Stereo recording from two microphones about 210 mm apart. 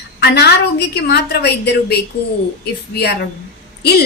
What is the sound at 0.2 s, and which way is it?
Speech, 50° left (ahead or behind).